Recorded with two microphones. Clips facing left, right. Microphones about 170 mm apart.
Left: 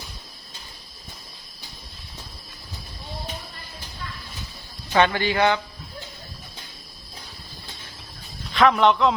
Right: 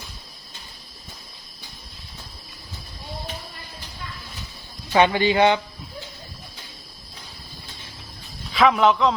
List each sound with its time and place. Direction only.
4.9 s speech: 15° right (ahead or behind)
8.5 s a man's voice: centre (ahead or behind)